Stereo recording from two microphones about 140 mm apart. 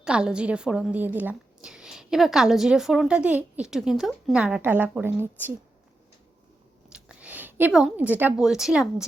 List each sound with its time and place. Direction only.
0.0 s a woman's voice: 5° right (ahead or behind)
6.9 s a woman's voice: 10° right (ahead or behind)